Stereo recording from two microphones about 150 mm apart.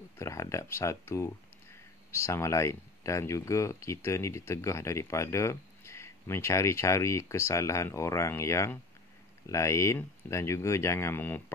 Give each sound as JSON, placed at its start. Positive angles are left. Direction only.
{"t": 0.2, "sound": "speech", "side_deg": 20}